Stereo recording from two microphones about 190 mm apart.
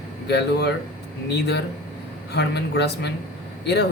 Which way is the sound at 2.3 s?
60° left (ahead or behind).